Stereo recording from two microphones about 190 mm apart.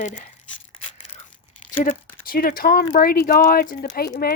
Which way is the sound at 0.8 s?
30° left (ahead or behind).